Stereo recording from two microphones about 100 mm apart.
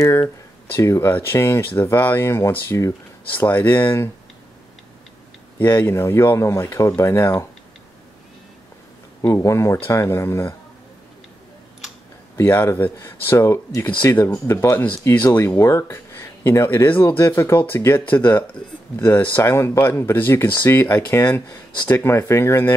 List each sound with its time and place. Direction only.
0.0 s speech: 30° left (ahead or behind)
5.9 s speech: 25° left (ahead or behind)
9.2 s speech: 30° left (ahead or behind)
12.4 s speech: 25° left (ahead or behind)
15.4 s speech: 30° left (ahead or behind)